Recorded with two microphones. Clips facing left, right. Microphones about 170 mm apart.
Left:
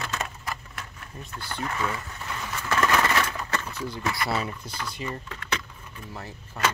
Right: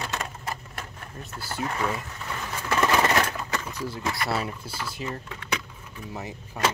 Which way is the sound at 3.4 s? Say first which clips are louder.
Even; 10° right (ahead or behind).